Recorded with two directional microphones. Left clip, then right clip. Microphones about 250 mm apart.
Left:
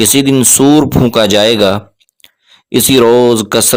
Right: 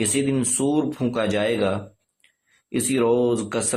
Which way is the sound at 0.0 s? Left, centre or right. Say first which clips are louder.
Left 13 dB; left.